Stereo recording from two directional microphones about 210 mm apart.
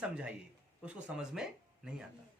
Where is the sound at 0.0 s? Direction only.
5° right (ahead or behind).